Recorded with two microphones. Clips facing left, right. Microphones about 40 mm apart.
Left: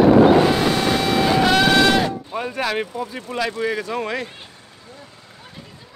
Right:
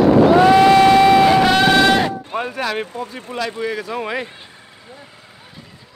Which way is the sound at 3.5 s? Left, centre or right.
Centre.